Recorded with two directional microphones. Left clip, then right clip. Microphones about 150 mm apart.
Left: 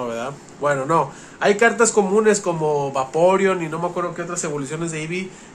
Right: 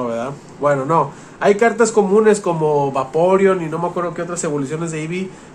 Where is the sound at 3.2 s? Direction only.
10° left (ahead or behind).